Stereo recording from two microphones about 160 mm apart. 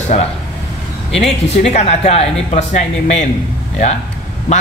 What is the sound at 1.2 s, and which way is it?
A woman's voice, 40° left (ahead or behind).